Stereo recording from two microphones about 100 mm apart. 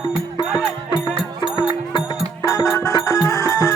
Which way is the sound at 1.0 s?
55° left (ahead or behind).